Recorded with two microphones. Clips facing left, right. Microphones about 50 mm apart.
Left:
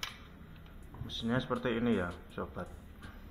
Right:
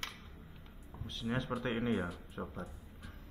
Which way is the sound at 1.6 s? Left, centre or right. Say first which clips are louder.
Left 3 dB; left.